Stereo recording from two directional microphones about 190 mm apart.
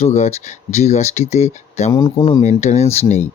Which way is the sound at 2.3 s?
40° left (ahead or behind).